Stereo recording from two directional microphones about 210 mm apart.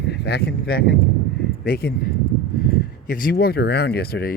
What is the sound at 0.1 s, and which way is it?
Speech, 50° left (ahead or behind).